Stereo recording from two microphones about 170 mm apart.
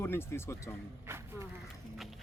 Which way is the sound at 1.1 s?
15° right (ahead or behind).